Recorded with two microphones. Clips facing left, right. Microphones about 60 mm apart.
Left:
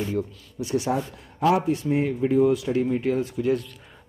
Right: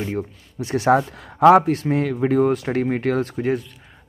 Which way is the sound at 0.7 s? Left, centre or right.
Right.